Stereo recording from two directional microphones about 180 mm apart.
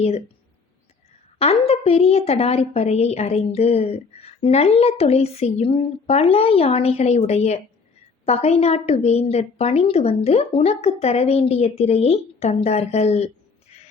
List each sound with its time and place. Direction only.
1.4 s a woman's voice: 35° left (ahead or behind)